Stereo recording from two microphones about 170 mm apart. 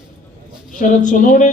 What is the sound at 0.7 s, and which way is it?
Speech, 50° left (ahead or behind).